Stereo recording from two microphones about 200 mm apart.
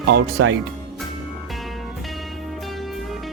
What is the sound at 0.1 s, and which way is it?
Speech, 70° right (ahead or behind).